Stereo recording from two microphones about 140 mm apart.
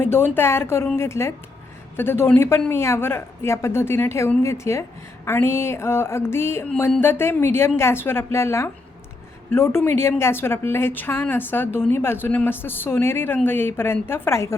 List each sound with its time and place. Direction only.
0.0 s a woman's voice: 15° left (ahead or behind)